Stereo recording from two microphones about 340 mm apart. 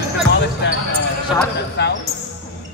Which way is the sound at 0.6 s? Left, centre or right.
Left.